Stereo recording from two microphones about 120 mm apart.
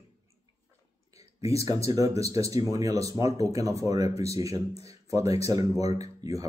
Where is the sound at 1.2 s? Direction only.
60° left (ahead or behind).